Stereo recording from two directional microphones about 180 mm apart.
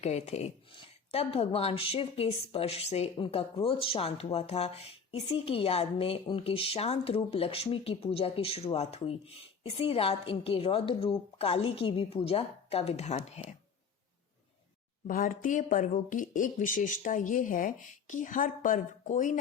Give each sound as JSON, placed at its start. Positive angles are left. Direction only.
{"t": 0.0, "sound": "a woman's voice", "side_deg": 40}
{"t": 15.0, "sound": "speech", "side_deg": 50}